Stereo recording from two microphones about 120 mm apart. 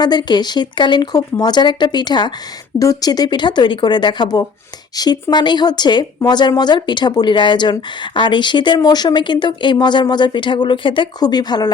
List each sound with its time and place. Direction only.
0.0 s speech: 35° left (ahead or behind)